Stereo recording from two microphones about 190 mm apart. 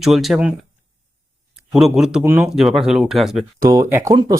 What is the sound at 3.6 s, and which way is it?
Speech, 15° right (ahead or behind).